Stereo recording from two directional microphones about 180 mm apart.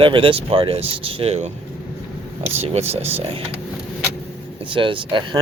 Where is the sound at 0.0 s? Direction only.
30° right (ahead or behind).